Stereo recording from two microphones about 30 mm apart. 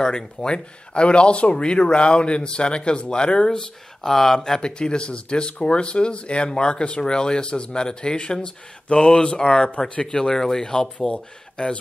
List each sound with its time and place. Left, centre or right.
0.0 s speech: left
4.0 s speech: centre
4.6 s speech: left
9.8 s speech: left
10.1 s speech: centre
11.0 s speech: left